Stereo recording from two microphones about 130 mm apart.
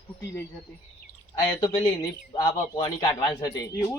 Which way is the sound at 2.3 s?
30° left (ahead or behind).